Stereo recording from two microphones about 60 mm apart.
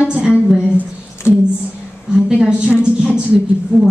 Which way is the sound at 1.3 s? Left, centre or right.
Left.